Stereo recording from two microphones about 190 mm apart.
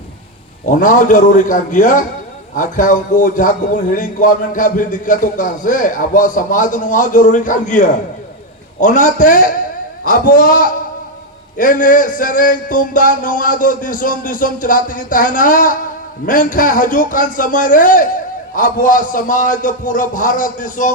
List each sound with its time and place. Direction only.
0.6 s a man's voice: 45° left (ahead or behind)